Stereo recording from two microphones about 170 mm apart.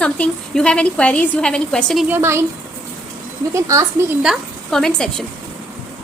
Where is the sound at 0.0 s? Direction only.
5° left (ahead or behind).